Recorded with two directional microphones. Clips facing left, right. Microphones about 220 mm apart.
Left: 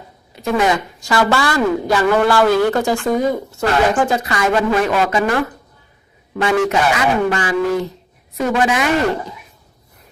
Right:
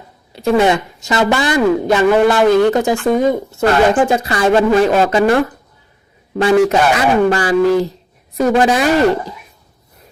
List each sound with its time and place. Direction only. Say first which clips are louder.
0.3 s a woman's voice: right 4 dB; 30° right (ahead or behind)